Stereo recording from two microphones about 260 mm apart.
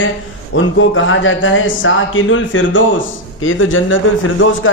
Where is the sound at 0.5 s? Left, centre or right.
Left.